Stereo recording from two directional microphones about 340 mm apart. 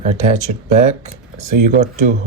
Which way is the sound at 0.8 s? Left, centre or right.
Centre.